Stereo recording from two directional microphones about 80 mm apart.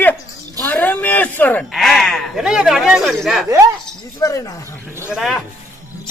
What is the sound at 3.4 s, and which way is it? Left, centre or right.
Speech, right.